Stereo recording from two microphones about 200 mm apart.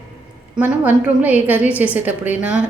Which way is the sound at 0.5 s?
10° right (ahead or behind).